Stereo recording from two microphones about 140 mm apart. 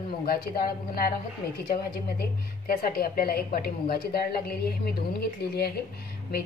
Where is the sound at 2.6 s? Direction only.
90° left.